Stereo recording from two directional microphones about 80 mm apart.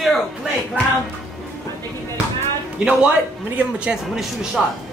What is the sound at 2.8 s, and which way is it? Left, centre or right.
Speech, centre.